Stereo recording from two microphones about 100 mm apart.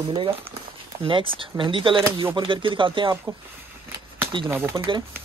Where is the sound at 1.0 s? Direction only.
60° right (ahead or behind).